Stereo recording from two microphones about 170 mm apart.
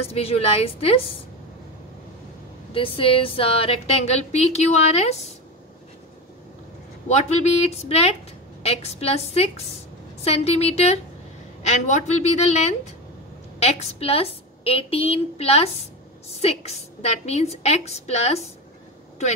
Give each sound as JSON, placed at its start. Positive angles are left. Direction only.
{"t": 0.1, "sound": "a woman's voice", "side_deg": 35}
{"t": 2.7, "sound": "a woman's voice", "side_deg": 30}
{"t": 7.1, "sound": "a woman's voice", "side_deg": 40}